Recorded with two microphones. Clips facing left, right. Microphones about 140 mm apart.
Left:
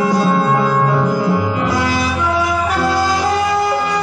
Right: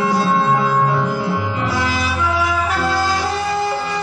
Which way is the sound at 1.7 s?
15° left (ahead or behind).